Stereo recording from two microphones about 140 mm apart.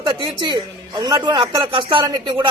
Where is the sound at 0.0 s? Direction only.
35° right (ahead or behind).